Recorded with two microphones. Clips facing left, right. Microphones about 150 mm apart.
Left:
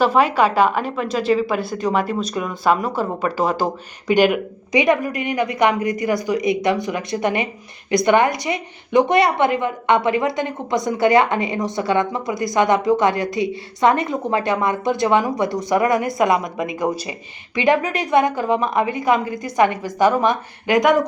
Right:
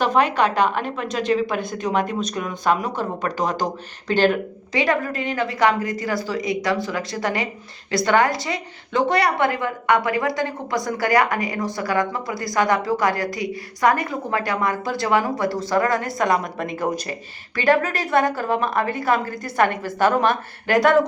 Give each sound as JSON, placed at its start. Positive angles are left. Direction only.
{"t": 0.0, "sound": "a woman's voice", "side_deg": 5}
{"t": 16.1, "sound": "a woman's voice", "side_deg": 0}